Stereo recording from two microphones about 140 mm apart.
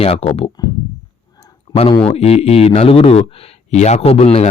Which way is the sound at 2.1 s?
45° left (ahead or behind).